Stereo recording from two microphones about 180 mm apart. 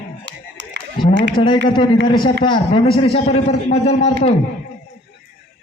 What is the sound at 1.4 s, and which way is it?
A man's voice, 30° left (ahead or behind).